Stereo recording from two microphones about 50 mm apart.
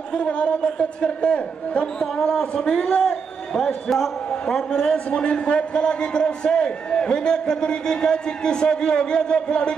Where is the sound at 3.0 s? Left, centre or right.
Centre.